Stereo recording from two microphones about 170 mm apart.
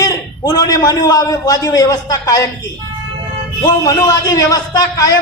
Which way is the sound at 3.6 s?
20° left (ahead or behind).